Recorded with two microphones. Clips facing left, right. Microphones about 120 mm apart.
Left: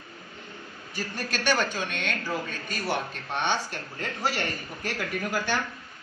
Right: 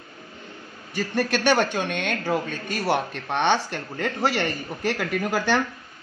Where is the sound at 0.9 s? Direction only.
65° right (ahead or behind).